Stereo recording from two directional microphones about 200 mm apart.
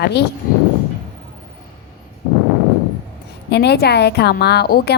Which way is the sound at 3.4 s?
55° left (ahead or behind).